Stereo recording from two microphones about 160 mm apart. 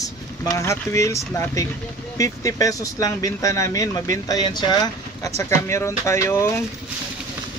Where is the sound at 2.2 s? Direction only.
20° left (ahead or behind).